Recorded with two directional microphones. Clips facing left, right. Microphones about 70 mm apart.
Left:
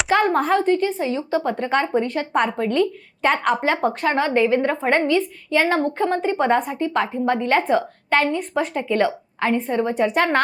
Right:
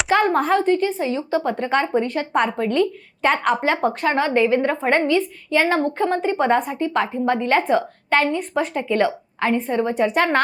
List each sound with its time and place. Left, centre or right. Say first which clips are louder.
0.2 s a woman's voice: even; right